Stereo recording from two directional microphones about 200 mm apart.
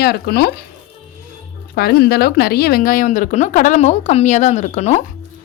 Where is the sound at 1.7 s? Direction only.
50° left (ahead or behind); by 5.0 s 35° left (ahead or behind).